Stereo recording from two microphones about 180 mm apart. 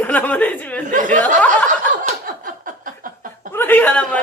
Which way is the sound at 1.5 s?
45° right (ahead or behind).